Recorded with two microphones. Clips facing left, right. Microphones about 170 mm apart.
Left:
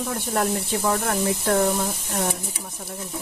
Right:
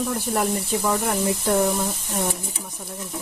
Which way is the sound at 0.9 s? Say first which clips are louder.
Right 1 dB; 10° right (ahead or behind).